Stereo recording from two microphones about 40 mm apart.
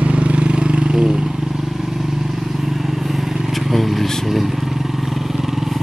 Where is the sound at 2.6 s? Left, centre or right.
Centre.